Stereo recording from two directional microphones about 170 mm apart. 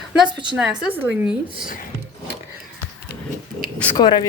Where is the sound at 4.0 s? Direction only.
25° left (ahead or behind).